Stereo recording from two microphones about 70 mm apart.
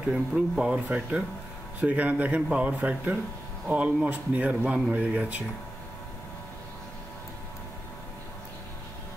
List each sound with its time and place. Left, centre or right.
0.0 s speech: centre